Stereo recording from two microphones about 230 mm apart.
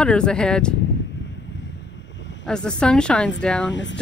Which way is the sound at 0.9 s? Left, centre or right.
Left.